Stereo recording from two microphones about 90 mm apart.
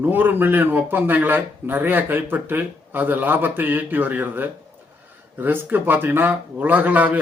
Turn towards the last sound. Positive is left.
turn(degrees=-20)  # may be behind; listen again after turning